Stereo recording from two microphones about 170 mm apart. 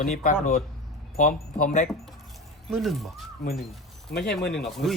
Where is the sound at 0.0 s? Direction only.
55° left (ahead or behind).